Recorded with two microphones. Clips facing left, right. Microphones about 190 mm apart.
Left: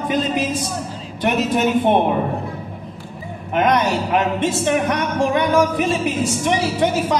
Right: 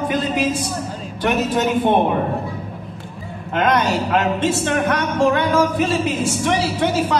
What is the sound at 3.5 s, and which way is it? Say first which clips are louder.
Speech: left 1 dB; 15° left (ahead or behind).